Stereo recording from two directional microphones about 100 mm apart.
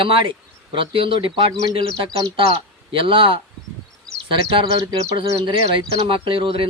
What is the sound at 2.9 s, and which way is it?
Speech, 60° right (ahead or behind).